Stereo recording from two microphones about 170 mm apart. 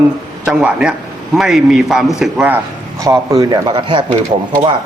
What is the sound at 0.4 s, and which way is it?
A man's voice, 5° right (ahead or behind).